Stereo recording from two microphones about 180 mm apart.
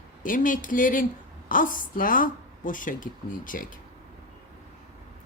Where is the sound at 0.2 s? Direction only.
50° left (ahead or behind).